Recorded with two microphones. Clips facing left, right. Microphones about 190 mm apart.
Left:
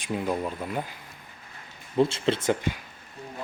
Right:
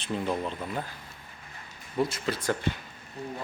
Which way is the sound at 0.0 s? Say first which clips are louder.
Left 2 dB; 10° left (ahead or behind).